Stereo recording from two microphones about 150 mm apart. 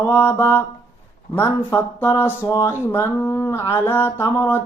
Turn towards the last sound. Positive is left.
turn(degrees=15)  # may be behind; listen again after turning